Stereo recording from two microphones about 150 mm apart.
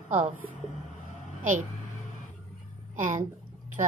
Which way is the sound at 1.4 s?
60° right (ahead or behind).